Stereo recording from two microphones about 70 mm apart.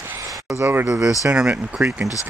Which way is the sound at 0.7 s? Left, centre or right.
Right.